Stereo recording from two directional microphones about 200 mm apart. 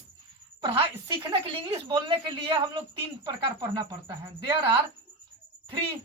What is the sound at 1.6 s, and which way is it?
A woman's voice, 25° right (ahead or behind).